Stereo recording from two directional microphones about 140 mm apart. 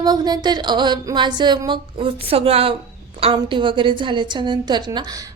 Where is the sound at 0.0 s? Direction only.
30° right (ahead or behind).